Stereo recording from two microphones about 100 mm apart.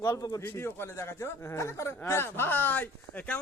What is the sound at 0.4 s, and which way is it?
A man's voice, 25° left (ahead or behind).